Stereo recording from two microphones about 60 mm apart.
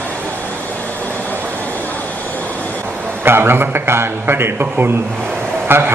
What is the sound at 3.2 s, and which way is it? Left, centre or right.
A man's voice, right.